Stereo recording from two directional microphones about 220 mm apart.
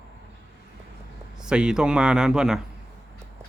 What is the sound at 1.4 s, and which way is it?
Speech, 5° right (ahead or behind).